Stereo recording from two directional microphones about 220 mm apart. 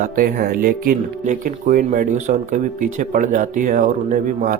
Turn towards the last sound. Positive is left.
turn(degrees=-35)  # may be behind; listen again after turning